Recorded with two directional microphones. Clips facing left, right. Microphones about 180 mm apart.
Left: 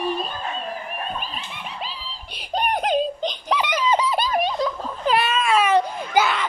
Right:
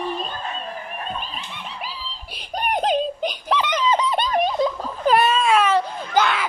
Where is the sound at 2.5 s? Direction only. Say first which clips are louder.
Left 3 dB; 25° left (ahead or behind).